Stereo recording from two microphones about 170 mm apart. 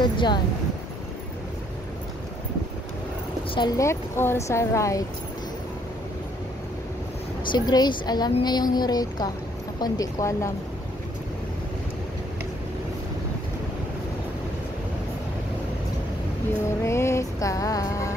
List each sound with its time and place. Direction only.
0.0 s a sound: 25° left (ahead or behind)
3.5 s speech: 20° left (ahead or behind)
7.5 s a woman's voice: 25° left (ahead or behind)
16.8 s music: 15° left (ahead or behind)